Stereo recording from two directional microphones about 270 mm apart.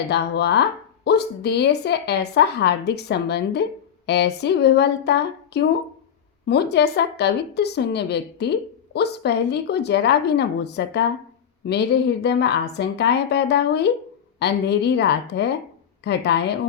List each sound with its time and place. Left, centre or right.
0.1 s a woman's voice: left